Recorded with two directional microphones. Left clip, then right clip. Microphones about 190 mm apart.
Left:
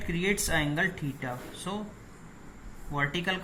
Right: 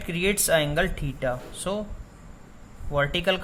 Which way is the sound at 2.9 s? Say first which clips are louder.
Right 6 dB; 55° right (ahead or behind).